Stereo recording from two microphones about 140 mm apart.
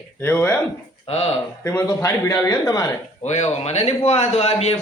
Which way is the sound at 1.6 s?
15° left (ahead or behind).